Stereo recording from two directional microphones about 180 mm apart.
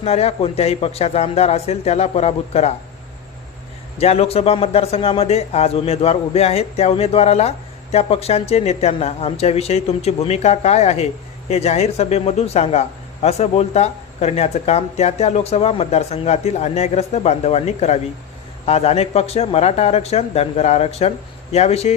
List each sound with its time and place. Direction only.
0.0 s a man's voice: 35° left (ahead or behind)
3.9 s a man's voice: 35° left (ahead or behind)